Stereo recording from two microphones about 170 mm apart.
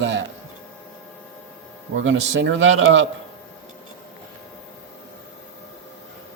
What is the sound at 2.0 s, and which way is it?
A man's voice, 90° right.